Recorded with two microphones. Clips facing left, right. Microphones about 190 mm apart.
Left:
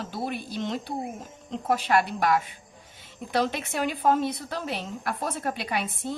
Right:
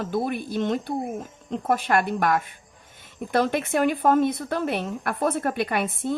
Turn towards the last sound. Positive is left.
turn(degrees=-55)  # may be behind; listen again after turning